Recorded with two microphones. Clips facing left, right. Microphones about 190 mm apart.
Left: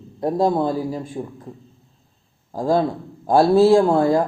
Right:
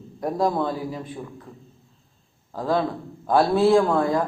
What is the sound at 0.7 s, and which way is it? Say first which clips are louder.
Speech: left 5 dB; 40° left (ahead or behind).